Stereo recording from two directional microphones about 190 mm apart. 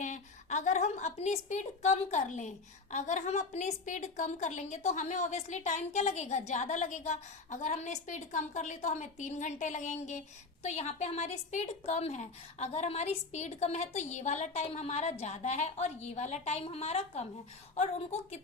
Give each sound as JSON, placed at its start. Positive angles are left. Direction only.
{"t": 0.0, "sound": "a woman's voice", "side_deg": 40}